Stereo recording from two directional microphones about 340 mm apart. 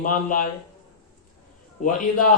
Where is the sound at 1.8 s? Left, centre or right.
Left.